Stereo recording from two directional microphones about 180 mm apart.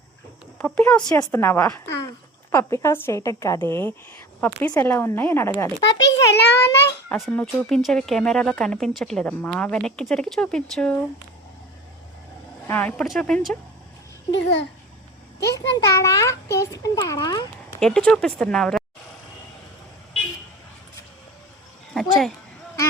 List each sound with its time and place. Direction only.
0.6 s a woman's voice: 5° left (ahead or behind)
6.3 s a child's voice: 70° left (ahead or behind)
7.1 s speech: 5° left (ahead or behind)
12.6 s speech: 10° left (ahead or behind)
14.3 s babbling: 80° left
15.5 s a child's voice: 20° left (ahead or behind)
17.7 s speech: 5° left (ahead or behind)
22.0 s a sound: 5° left (ahead or behind)